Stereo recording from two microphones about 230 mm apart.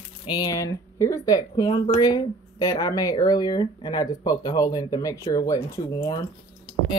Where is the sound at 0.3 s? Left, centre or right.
Centre.